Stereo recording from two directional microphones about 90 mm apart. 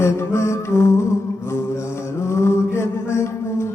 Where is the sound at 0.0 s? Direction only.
30° left (ahead or behind).